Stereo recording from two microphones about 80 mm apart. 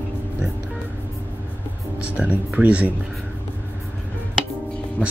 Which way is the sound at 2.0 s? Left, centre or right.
Centre.